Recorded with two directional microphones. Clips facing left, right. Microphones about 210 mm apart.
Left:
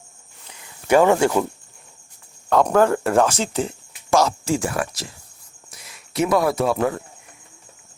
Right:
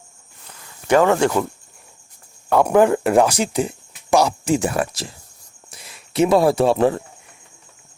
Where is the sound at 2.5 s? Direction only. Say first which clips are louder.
Right 2 dB; 10° right (ahead or behind); by 7.0 s 30° right (ahead or behind).